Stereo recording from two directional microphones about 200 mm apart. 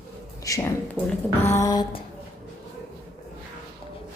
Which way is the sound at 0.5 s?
15° left (ahead or behind).